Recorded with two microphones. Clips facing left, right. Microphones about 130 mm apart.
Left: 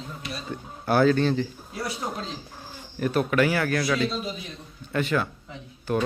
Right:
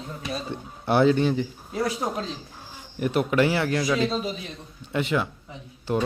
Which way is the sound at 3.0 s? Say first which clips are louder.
Right 1 dB; 20° right (ahead or behind).